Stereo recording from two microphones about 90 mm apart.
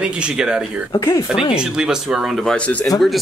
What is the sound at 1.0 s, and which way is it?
Speech, 35° left (ahead or behind).